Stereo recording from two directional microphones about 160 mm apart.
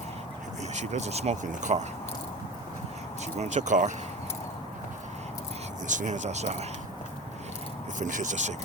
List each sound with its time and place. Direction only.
0.7 s speech: 45° right (ahead or behind)
3.3 s speech: 45° right (ahead or behind)
5.9 s speech: 50° right (ahead or behind)
7.9 s speech: 50° right (ahead or behind)